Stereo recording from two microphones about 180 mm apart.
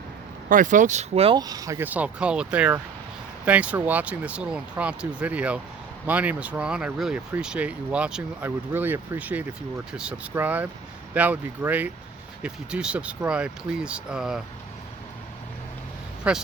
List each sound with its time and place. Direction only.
0.4 s speech: 50° right (ahead or behind)
1.4 s speech: 20° right (ahead or behind); by 14.4 s 5° right (ahead or behind)
16.3 s speech: 5° right (ahead or behind)